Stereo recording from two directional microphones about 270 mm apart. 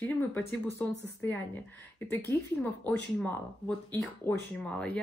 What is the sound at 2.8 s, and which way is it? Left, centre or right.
Speech, centre.